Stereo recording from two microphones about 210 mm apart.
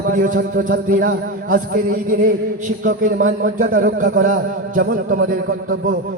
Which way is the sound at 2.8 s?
40° right (ahead or behind).